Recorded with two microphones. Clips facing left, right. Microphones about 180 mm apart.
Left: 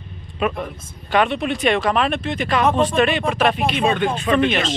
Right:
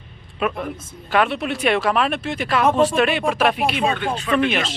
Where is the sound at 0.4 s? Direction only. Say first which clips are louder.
Left 1 dB; 5° right (ahead or behind).